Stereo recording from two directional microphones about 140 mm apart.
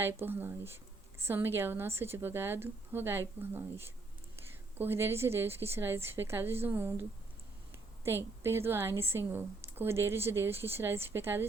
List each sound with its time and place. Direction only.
0.0 s a woman's voice: 15° right (ahead or behind)
8.0 s a woman's voice: 20° right (ahead or behind)